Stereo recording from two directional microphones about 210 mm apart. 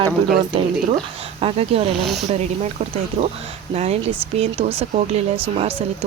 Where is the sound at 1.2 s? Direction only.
25° right (ahead or behind).